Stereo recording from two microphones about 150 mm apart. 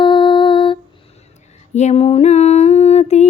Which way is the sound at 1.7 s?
50° left (ahead or behind).